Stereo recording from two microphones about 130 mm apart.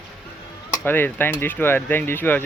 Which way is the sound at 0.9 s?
15° left (ahead or behind).